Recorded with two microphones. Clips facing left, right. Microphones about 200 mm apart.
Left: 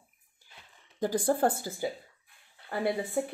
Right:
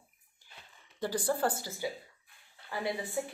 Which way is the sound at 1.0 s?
50° left (ahead or behind).